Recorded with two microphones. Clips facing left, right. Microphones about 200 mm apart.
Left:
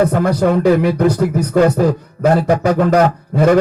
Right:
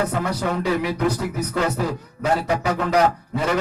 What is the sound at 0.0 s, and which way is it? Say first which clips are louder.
Speech: left 9 dB; 50° left (ahead or behind).